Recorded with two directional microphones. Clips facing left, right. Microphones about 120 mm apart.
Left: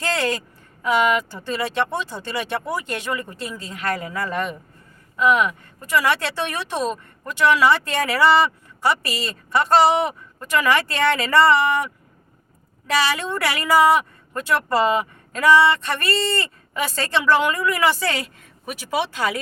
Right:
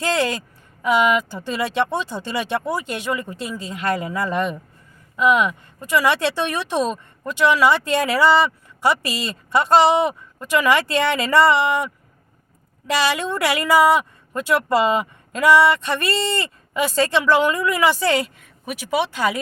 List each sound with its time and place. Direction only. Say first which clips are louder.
0.0 s a woman's voice: right 2 dB; 15° right (ahead or behind)
13.1 s speech: right 3 dB; 20° right (ahead or behind)